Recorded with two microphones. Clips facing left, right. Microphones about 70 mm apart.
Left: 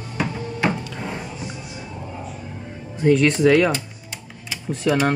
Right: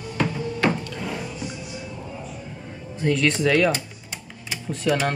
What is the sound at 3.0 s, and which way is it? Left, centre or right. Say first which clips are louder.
Speech: left 5 dB; centre.